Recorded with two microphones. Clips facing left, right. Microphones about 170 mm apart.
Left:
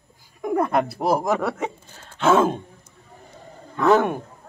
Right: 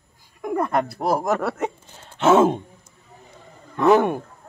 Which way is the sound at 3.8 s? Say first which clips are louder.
Right 1 dB; 10° right (ahead or behind).